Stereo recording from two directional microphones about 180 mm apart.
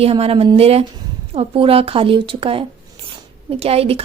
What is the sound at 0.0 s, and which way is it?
A woman's voice, 35° right (ahead or behind).